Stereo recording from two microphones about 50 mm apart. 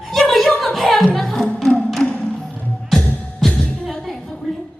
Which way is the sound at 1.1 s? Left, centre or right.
Centre.